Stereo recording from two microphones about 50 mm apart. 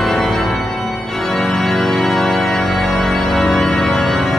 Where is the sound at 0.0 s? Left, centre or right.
Centre.